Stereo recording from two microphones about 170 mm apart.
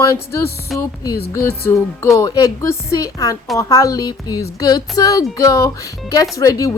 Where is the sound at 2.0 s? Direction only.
20° left (ahead or behind).